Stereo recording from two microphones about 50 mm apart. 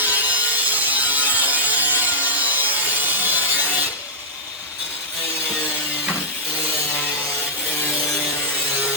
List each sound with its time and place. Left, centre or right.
0.0 s wood: right